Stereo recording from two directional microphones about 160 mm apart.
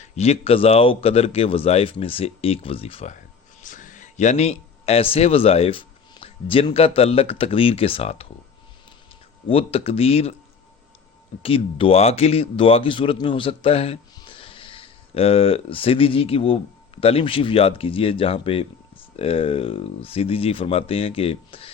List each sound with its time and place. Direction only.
0.0 s speech: 40° left (ahead or behind)
3.6 s speech: 55° left (ahead or behind); by 8.3 s 35° left (ahead or behind)
9.5 s speech: 35° left (ahead or behind)
11.4 s speech: 35° left (ahead or behind)